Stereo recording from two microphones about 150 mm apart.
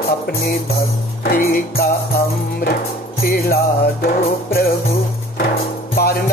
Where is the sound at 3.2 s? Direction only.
80° left.